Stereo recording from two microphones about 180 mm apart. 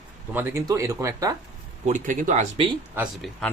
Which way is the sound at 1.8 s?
45° right (ahead or behind).